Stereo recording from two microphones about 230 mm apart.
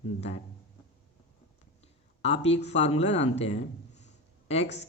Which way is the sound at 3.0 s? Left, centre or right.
Left.